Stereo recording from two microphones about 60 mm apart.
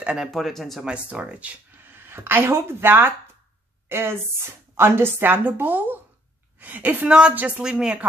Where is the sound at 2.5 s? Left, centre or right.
Right.